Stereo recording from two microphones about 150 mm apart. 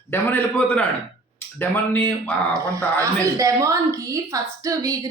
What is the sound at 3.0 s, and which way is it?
Speech, 20° right (ahead or behind).